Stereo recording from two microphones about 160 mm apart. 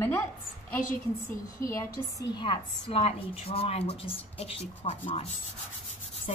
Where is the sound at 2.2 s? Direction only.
30° left (ahead or behind).